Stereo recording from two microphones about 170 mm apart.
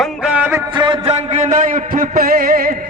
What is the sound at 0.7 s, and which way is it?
A man's voice, 25° right (ahead or behind).